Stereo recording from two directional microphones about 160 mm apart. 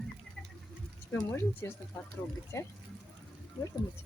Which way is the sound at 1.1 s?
15° left (ahead or behind).